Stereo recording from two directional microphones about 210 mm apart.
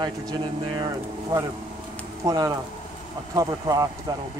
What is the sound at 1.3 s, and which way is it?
Speech, 15° right (ahead or behind).